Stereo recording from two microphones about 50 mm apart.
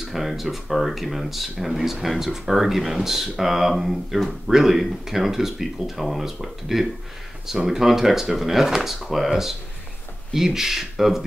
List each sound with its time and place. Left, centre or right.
0.1 s speech: centre